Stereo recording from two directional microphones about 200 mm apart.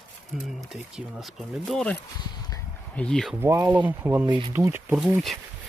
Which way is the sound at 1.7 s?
5° left (ahead or behind).